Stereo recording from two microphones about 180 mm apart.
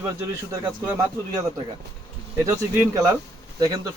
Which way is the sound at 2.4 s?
15° right (ahead or behind).